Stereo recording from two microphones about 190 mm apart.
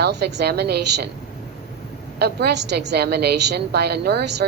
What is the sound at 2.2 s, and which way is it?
A woman's voice, 60° right (ahead or behind).